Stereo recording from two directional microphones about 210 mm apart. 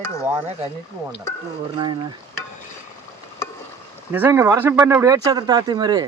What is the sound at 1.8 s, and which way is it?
Speech, 20° right (ahead or behind).